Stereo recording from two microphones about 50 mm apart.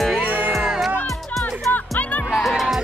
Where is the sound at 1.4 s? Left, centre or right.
Left.